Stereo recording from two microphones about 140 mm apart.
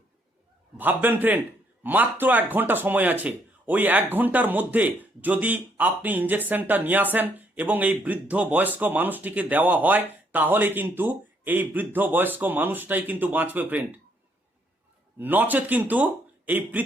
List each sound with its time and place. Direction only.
0.8 s speech: 15° right (ahead or behind)
15.2 s speech: 10° right (ahead or behind)